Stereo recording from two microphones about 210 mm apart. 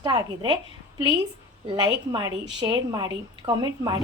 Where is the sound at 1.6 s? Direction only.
20° right (ahead or behind).